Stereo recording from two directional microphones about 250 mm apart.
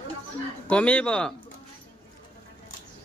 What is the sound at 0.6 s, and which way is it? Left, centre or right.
Speech, centre.